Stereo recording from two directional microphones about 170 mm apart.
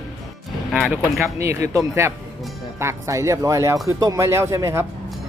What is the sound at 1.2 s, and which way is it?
Speech, 15° right (ahead or behind).